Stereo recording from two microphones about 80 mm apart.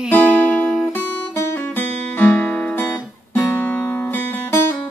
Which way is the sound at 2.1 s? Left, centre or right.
Left.